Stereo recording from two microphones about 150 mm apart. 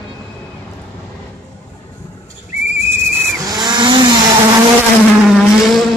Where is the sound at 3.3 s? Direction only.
25° right (ahead or behind).